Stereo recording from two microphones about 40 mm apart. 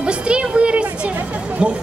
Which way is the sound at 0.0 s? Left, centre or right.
Right.